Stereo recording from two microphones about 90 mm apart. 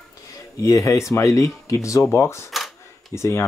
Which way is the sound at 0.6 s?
35° left (ahead or behind).